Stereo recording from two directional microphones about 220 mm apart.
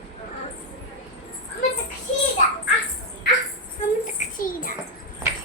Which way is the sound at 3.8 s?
30° left (ahead or behind).